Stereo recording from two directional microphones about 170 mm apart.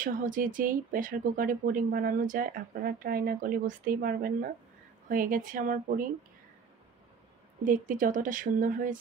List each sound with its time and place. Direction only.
0.0 s speech: 50° right (ahead or behind)
7.6 s speech: 50° right (ahead or behind)